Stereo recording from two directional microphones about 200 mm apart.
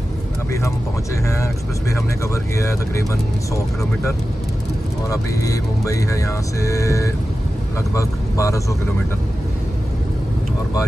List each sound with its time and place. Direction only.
1.3 s music: 15° left (ahead or behind)
5.1 s music: 15° left (ahead or behind)
7.9 s speech: 15° left (ahead or behind)